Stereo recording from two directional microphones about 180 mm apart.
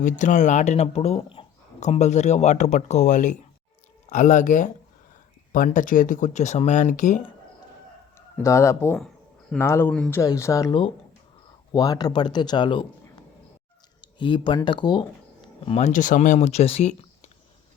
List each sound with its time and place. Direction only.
0.0 s speech: 45° left (ahead or behind)
8.4 s speech: 15° left (ahead or behind)
9.0 s a sound: centre (ahead or behind)
9.6 s speech: 15° left (ahead or behind)
14.0 s speech: 25° left (ahead or behind)
15.6 s speech: 35° left (ahead or behind)